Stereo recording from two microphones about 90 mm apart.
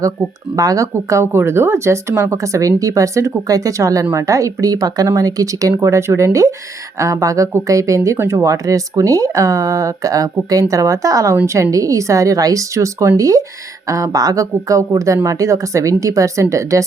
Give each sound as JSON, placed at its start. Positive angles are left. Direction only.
{"t": 0.5, "sound": "speech", "side_deg": -40}